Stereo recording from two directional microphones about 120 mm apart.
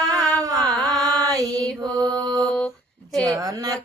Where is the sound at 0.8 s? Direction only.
35° right (ahead or behind).